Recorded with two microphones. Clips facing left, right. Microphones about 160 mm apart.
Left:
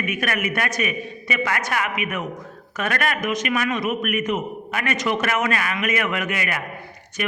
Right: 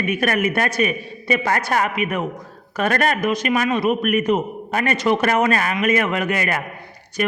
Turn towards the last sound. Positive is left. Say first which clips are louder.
# right 5 dB
turn(degrees=-40)  # may be behind; listen again after turning